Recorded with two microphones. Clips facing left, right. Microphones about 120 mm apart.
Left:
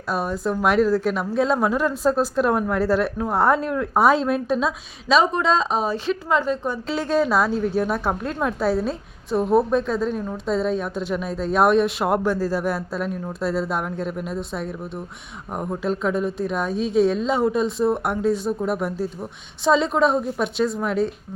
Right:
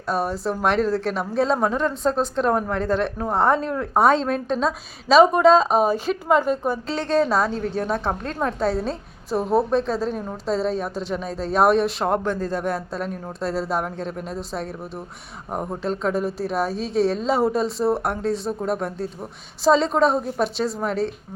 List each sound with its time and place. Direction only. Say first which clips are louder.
0.1 s a woman's voice: even; centre (ahead or behind)
5.1 s a woman's voice: right 4 dB; 10° right (ahead or behind)
5.4 s a woman's voice: right 6 dB; 45° right (ahead or behind)
6.8 s a woman's voice: left 1 dB; 5° left (ahead or behind)